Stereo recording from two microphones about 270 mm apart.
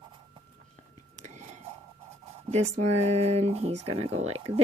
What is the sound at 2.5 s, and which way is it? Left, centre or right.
Speech, right.